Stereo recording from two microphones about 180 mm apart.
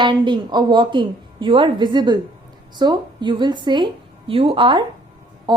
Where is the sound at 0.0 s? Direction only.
25° right (ahead or behind).